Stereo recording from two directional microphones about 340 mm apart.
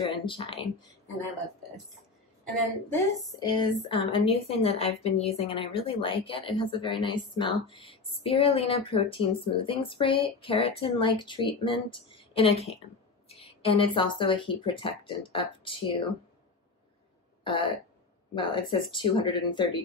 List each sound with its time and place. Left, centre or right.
0.0 s speech: centre
3.3 s speech: centre
17.4 s throat clearing: centre
18.3 s speech: centre